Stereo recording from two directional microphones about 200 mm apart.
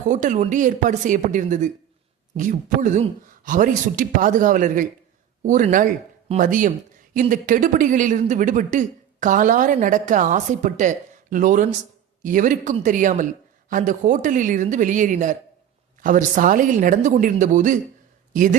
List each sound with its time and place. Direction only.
0.0 s speech: 40° right (ahead or behind)